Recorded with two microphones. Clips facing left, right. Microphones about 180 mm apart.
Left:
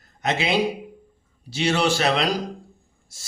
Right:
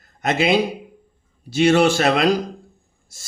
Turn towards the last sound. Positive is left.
turn(degrees=-50)  # may be behind; listen again after turning